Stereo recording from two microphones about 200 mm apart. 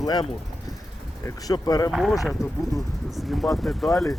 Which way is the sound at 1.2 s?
20° left (ahead or behind).